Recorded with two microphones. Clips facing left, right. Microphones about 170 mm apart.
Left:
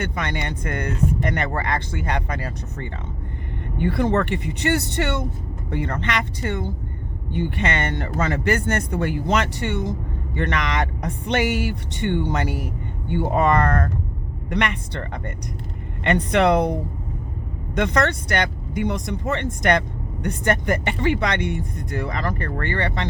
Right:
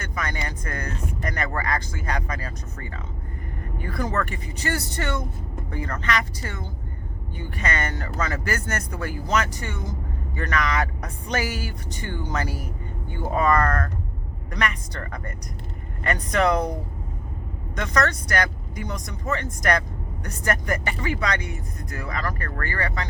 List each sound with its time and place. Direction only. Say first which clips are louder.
0.0 s speech: left 4 dB; 30° left (ahead or behind)
17.7 s speech: left 4 dB; 25° left (ahead or behind)